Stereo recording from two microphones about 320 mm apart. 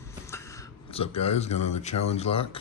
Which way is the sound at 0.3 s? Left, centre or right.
Centre.